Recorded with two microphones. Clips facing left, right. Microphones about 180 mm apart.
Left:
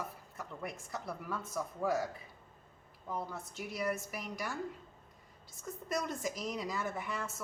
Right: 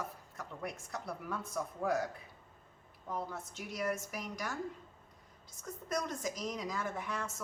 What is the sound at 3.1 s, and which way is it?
Speech, centre (ahead or behind).